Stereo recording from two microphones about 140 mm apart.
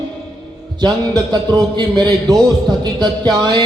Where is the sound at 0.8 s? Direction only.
30° right (ahead or behind).